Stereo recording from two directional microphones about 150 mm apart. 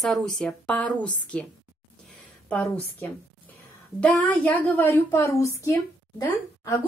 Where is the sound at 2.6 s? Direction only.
10° left (ahead or behind).